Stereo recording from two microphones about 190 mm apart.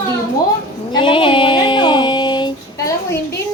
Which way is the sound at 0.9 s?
25° left (ahead or behind).